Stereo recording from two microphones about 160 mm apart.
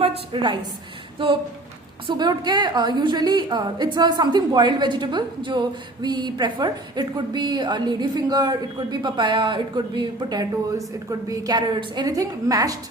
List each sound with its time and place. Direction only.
0.0 s a woman's voice: 30° right (ahead or behind)
2.0 s a woman's voice: 25° right (ahead or behind)